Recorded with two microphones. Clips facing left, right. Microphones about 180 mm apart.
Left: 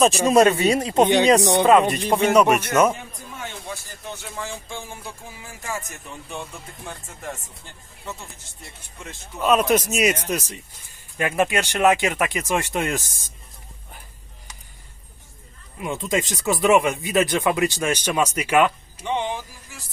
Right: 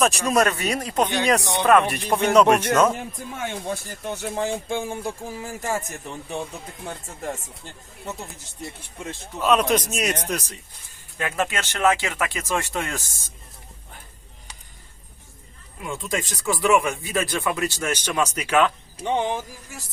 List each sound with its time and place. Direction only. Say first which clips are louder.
0.0 s speech: left 5 dB; 25° left (ahead or behind); by 2.9 s 10° left (ahead or behind)
3.3 s speech: right 5 dB; 50° right (ahead or behind)
9.4 s speech: left 1 dB; centre (ahead or behind); by 13.3 s 20° left (ahead or behind)
15.8 s speech: left 4 dB; 20° left (ahead or behind)